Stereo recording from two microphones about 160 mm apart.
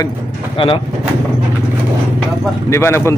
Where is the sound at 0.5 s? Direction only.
30° left (ahead or behind).